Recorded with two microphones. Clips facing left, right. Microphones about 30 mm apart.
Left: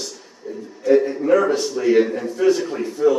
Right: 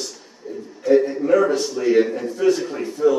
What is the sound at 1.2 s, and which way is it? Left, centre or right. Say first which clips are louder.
A man's voice: even; centre.